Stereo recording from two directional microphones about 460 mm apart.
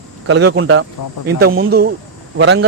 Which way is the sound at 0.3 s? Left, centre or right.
Right.